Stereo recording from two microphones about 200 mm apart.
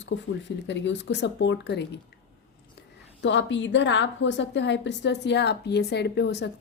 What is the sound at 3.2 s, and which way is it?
A woman's voice, 65° left (ahead or behind).